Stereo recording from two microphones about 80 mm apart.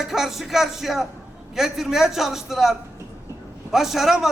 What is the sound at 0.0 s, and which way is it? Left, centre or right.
A man's voice, centre.